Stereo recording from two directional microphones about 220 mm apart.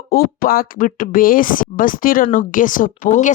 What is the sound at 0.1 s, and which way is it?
Speech, 40° left (ahead or behind).